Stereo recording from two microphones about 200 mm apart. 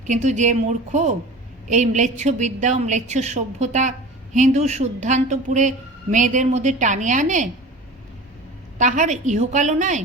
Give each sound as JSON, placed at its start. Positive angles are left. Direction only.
{"t": 0.0, "sound": "a woman's voice", "side_deg": -35}
{"t": 8.8, "sound": "a woman's voice", "side_deg": -35}